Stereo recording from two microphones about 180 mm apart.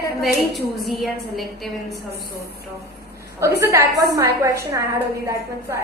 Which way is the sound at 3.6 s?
15° right (ahead or behind).